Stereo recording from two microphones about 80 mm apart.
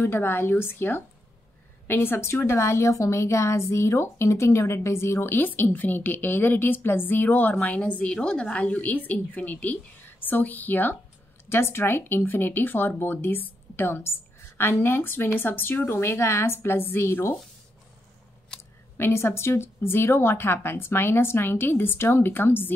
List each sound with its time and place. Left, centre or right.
0.0 s a woman's voice: left
18.5 s a sound: centre
18.9 s a woman's voice: left